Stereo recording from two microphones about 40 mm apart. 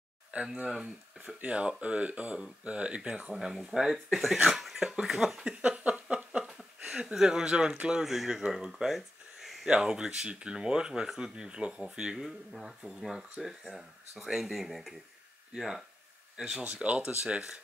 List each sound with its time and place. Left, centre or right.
0.3 s speech: right
0.7 s speech: centre
1.4 s speech: right
3.3 s speech: centre
4.5 s a sound: centre
5.0 s speech: centre
5.6 s a sound: right
7.2 s speech: centre
8.0 s speech: centre
9.7 s speech: centre
12.2 s speech: centre
16.6 s speech: right
17.2 s speech: right